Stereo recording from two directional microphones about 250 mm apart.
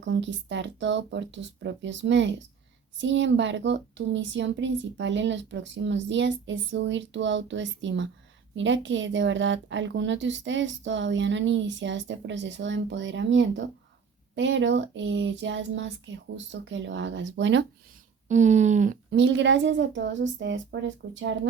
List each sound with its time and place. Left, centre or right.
0.0 s a woman's voice: right
18.3 s speech: right
19.1 s a woman's voice: right